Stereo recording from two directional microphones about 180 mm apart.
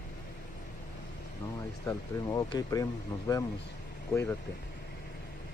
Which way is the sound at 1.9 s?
20° left (ahead or behind).